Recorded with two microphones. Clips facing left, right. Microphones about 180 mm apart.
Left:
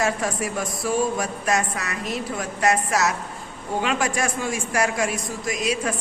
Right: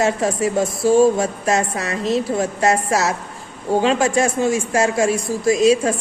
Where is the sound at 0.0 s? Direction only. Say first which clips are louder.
Right 6 dB; 25° right (ahead or behind).